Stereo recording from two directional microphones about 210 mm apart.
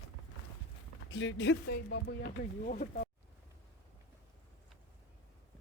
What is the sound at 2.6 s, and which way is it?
Speech, 40° left (ahead or behind).